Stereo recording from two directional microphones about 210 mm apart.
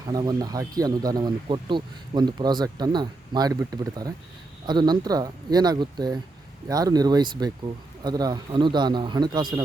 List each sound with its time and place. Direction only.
0.0 s speech: 20° right (ahead or behind)